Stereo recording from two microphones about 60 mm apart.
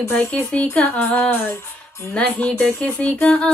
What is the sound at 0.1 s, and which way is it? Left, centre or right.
Speech, centre.